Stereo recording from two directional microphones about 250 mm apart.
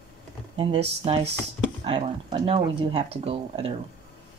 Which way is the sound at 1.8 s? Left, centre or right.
Centre.